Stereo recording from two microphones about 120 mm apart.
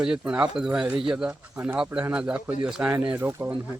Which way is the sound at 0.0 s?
5° right (ahead or behind).